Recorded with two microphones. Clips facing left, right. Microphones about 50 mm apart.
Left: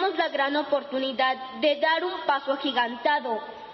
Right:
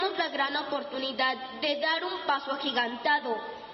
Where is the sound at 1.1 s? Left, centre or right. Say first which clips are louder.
Left 2 dB; centre.